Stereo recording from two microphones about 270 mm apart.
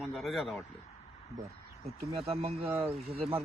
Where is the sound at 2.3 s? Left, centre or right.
Right.